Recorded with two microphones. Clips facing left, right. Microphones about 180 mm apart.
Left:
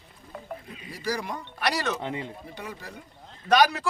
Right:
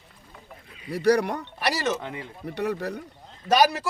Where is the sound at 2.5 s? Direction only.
70° right (ahead or behind).